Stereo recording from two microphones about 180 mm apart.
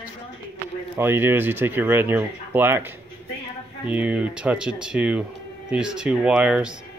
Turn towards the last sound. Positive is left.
turn(degrees=-5)  # may be behind; listen again after turning